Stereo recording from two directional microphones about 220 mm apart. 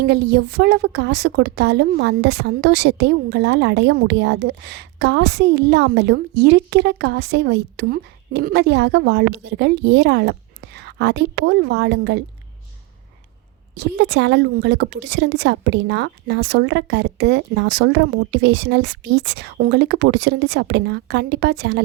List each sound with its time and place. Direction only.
0.0 s a woman's voice: 45° right (ahead or behind)
13.7 s a woman's voice: 55° right (ahead or behind)